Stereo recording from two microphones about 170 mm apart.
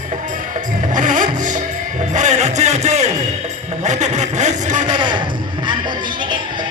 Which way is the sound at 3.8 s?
45° right (ahead or behind).